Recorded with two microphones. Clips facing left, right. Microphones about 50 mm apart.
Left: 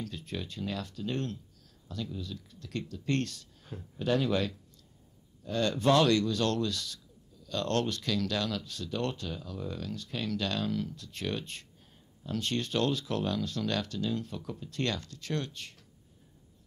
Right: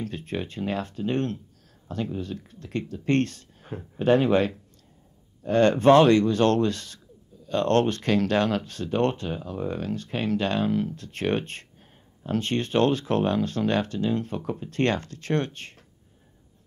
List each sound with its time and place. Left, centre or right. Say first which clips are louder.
0.0 s speech: right 7 dB; right